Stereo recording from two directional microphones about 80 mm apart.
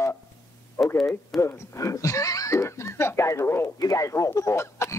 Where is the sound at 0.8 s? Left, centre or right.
Left.